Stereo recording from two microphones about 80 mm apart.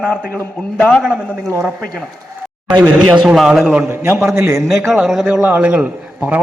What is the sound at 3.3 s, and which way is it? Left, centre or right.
Speech, centre.